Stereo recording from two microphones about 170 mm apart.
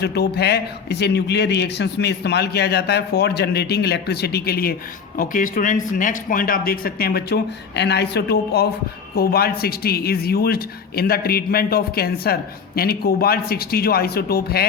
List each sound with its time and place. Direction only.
0.0 s a man's voice: 75° left (ahead or behind)
5.1 s speech: 55° left (ahead or behind); by 8.6 s 75° left (ahead or behind)
9.1 s speech: 65° left (ahead or behind)